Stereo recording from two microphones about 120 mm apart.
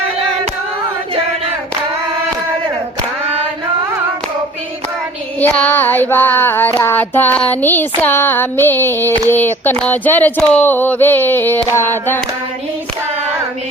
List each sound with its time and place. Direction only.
5.4 s child singing: 15° left (ahead or behind)